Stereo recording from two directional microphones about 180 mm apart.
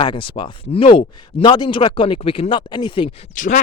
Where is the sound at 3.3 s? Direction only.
45° left (ahead or behind).